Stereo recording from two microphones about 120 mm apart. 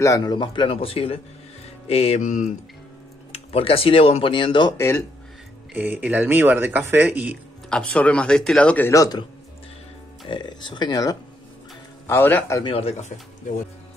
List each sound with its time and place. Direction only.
0.0 s speech: 30° left (ahead or behind); by 1.2 s 55° left (ahead or behind)
1.9 s mantra: 55° left (ahead or behind); by 2.5 s 85° left
3.3 s speech: 55° left (ahead or behind)
4.7 s a man's voice: 25° left (ahead or behind)
5.8 s speech: 15° right (ahead or behind)
7.7 s speech: 10° left (ahead or behind)
8.9 s a man's voice: 30° left (ahead or behind)
10.2 s speech: 40° left (ahead or behind)
12.1 s a man's voice: 20° left (ahead or behind)
12.6 s speech: 55° left (ahead or behind)